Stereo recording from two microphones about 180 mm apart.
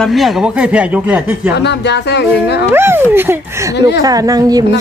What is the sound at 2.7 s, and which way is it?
Speech, 10° right (ahead or behind).